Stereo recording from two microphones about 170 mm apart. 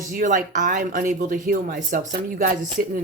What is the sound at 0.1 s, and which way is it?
Speech, 50° right (ahead or behind).